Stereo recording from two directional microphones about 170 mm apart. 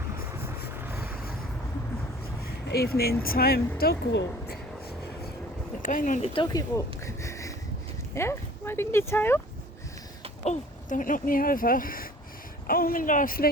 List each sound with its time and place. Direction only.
0.9 s vehicle: 65° left (ahead or behind)
2.4 s a sound: 65° left (ahead or behind)
3.2 s speech: 60° left (ahead or behind); by 4.5 s 80° left
5.8 s speech: 50° left (ahead or behind)
6.2 s speech: 30° left (ahead or behind); by 9.4 s 15° left (ahead or behind)
10.4 s speech: 45° left (ahead or behind)